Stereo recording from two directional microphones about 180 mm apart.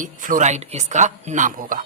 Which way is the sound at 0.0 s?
45° right (ahead or behind).